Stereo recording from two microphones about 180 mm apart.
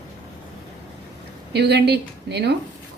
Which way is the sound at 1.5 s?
65° right (ahead or behind).